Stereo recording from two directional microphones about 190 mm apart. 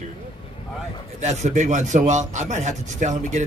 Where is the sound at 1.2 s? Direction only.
35° right (ahead or behind).